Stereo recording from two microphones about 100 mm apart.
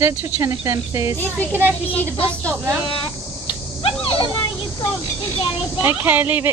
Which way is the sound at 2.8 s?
65° left (ahead or behind).